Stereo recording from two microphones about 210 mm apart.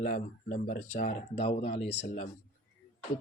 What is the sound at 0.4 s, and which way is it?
Speech, 35° left (ahead or behind).